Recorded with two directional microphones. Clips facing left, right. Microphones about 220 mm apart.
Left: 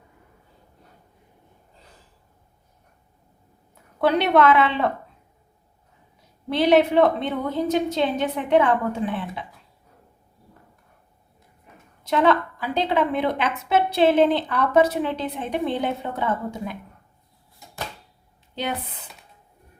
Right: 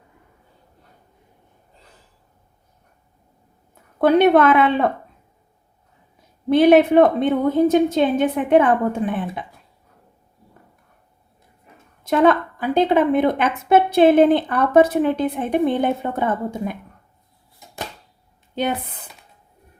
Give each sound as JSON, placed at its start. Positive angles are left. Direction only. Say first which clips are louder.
{"t": 4.0, "sound": "a woman's voice", "louder": "right 5 dB", "side_deg": -50}
{"t": 6.5, "sound": "a woman's voice", "louder": "right 5 dB", "side_deg": -50}
{"t": 12.0, "sound": "a woman's voice", "louder": "right 4 dB", "side_deg": -50}